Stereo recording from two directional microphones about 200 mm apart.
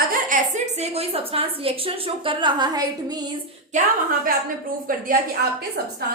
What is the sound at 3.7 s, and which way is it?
A woman's voice, 40° right (ahead or behind).